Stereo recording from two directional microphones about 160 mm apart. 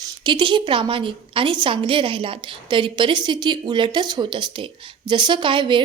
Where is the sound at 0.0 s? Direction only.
30° right (ahead or behind).